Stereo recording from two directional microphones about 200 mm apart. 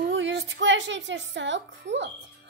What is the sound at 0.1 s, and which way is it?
A woman's voice, 65° right (ahead or behind).